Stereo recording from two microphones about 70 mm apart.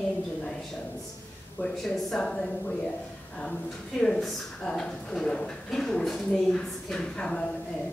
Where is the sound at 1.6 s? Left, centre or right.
Centre.